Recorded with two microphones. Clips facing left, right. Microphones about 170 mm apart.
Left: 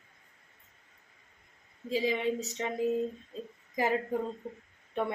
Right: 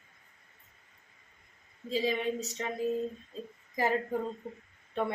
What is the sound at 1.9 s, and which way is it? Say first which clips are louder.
A woman's voice: left 1 dB; 15° left (ahead or behind).